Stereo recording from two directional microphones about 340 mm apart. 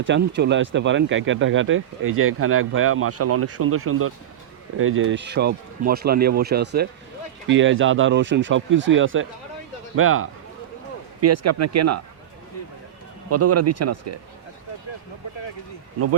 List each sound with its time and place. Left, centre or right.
0.0 s speech: right
13.3 s speech: right